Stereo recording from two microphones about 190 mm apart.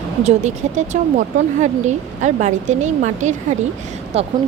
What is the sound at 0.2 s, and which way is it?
Speech, 35° right (ahead or behind).